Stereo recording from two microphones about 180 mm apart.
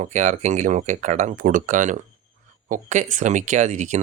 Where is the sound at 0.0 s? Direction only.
40° right (ahead or behind).